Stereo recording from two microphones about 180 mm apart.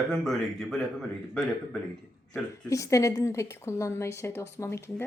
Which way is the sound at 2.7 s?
15° left (ahead or behind).